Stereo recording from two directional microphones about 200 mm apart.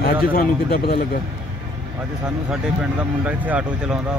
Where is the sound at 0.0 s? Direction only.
45° left (ahead or behind).